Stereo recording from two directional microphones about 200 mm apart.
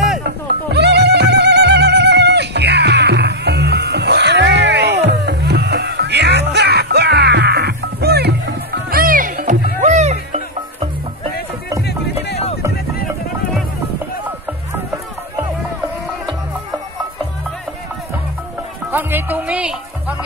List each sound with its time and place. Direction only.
0.7 s music: 55° right (ahead or behind); by 10.9 s 35° right (ahead or behind)
18.9 s music: 10° right (ahead or behind)